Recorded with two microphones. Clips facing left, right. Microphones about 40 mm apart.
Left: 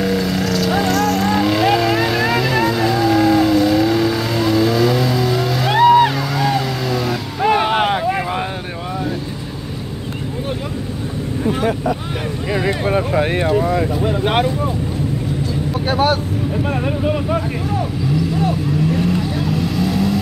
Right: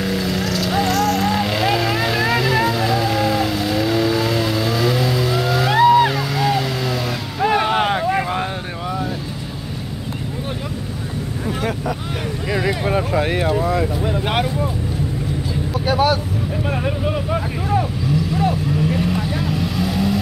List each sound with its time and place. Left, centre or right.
0.0 s vehicle: centre
7.5 s boat: centre
11.6 s vehicle: centre
12.6 s vehicle: left
15.9 s vehicle: left
16.6 s vehicle: centre
18.9 s vehicle: centre